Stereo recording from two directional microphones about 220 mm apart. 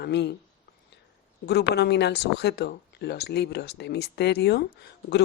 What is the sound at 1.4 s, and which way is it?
Speech, 50° left (ahead or behind).